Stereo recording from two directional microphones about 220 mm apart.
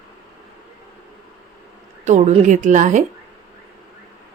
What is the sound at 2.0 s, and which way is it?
A woman's voice, 35° right (ahead or behind).